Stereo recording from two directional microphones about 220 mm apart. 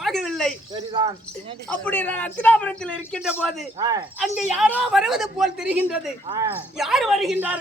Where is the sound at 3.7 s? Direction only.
15° right (ahead or behind).